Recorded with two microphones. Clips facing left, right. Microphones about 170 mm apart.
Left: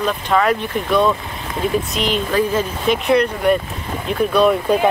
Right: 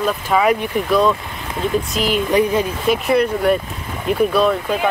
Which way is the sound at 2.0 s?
5° right (ahead or behind).